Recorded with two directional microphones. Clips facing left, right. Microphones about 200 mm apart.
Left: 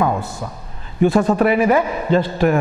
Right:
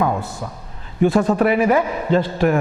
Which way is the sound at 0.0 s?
25° left (ahead or behind).